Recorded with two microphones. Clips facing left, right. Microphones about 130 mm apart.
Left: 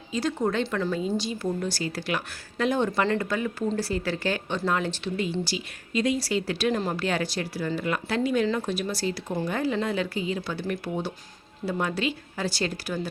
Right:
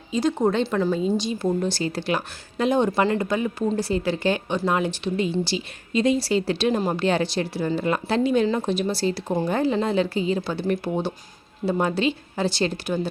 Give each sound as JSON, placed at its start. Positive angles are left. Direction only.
{"t": 0.1, "sound": "a woman's voice", "side_deg": -20}